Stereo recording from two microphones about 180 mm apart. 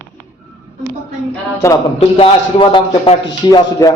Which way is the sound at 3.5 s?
20° left (ahead or behind).